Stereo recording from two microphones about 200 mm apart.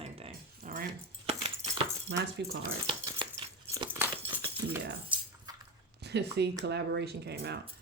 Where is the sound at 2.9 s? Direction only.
25° right (ahead or behind).